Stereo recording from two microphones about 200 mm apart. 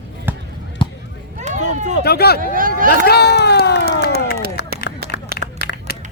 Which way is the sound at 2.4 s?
45° right (ahead or behind).